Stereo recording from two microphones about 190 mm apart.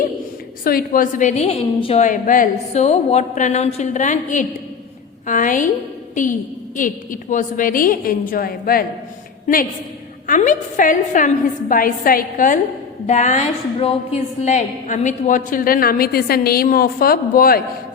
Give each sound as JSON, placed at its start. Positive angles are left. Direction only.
{"t": 0.6, "sound": "a woman's voice", "side_deg": 50}
{"t": 10.2, "sound": "a woman's voice", "side_deg": 40}